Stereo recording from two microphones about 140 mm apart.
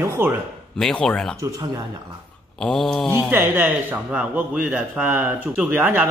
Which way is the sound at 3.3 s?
15° right (ahead or behind).